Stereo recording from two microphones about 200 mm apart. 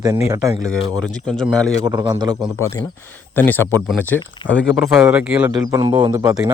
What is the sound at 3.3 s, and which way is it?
Speech, 10° left (ahead or behind).